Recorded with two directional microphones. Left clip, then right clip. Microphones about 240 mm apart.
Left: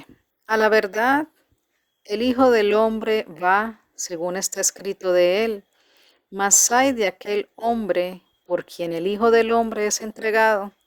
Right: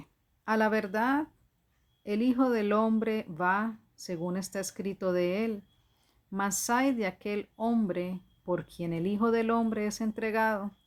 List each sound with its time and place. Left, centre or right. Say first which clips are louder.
0.0 s speech: right 2 dB; left